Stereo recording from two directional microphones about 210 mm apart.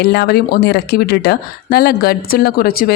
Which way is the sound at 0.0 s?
50° left (ahead or behind).